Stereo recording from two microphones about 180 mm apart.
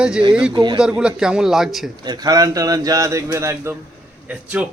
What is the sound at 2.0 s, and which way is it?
A man's voice, 20° right (ahead or behind).